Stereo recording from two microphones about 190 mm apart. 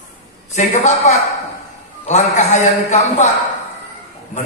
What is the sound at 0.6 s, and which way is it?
A man's voice, 35° left (ahead or behind).